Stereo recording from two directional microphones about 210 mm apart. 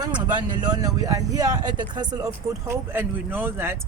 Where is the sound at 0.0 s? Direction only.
20° right (ahead or behind).